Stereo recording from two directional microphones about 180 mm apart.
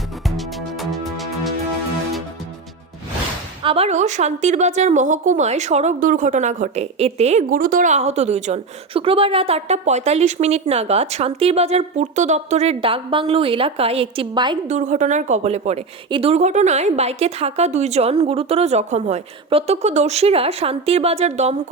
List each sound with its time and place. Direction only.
0.3 s music: centre (ahead or behind)
3.6 s a woman's voice: 30° right (ahead or behind)
14.7 s a woman's voice: 40° right (ahead or behind)